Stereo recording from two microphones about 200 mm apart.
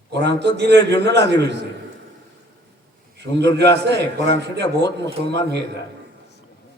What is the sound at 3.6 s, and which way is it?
A man's voice, 60° right (ahead or behind).